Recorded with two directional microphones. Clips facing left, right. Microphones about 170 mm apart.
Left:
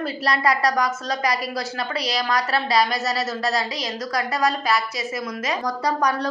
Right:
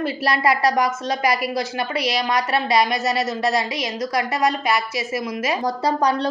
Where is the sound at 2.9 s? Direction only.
Centre (ahead or behind).